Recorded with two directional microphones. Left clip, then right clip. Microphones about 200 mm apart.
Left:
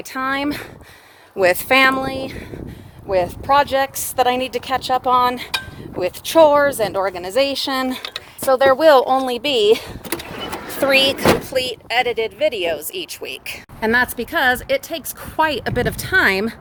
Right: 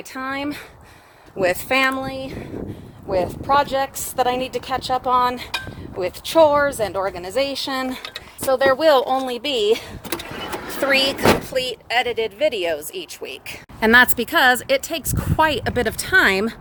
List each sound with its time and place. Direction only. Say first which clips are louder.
0.1 s a woman's voice: left 5 dB; 40° left (ahead or behind)
3.1 s a woman's voice: left 2 dB; 25° left (ahead or behind)
11.7 s speech: left 1 dB; 5° left (ahead or behind)
12.9 s speech: left 3 dB; 5° left (ahead or behind)
13.7 s speech: right 4 dB; 30° right (ahead or behind); by 16.6 s centre (ahead or behind)